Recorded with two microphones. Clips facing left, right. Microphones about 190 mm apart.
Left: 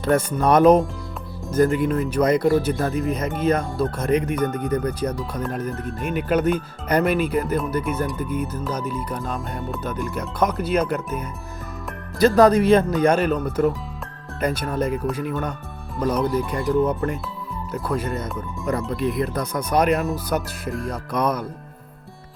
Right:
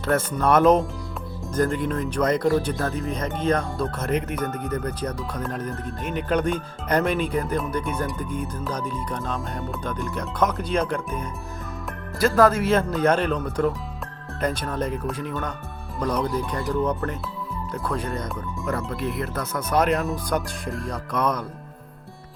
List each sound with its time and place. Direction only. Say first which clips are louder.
0.0 s speech: left 3 dB; 15° left (ahead or behind)
12.2 s speech: left 4 dB; 20° left (ahead or behind)
18.9 s speech: left 5 dB; 15° left (ahead or behind)
20.1 s speech: left 1 dB; centre (ahead or behind)